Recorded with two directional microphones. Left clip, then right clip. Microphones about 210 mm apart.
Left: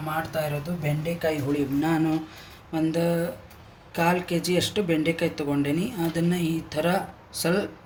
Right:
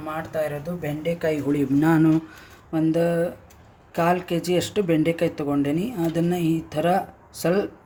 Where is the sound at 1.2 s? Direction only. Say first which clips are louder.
Right 2 dB; 45° right (ahead or behind).